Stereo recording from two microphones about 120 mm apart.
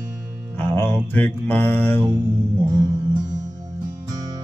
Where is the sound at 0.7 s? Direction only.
20° left (ahead or behind).